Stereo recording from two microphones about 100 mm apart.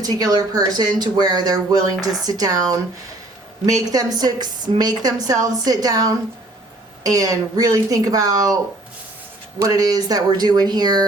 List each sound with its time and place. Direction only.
0.0 s speech: 40° right (ahead or behind)
9.6 s speech: 40° right (ahead or behind)